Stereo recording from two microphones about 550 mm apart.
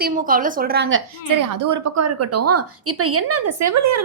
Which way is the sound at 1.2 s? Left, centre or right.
Right.